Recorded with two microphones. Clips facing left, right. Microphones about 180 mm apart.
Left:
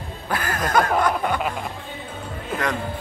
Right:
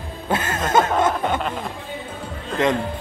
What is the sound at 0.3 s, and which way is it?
Snicker, 25° right (ahead or behind).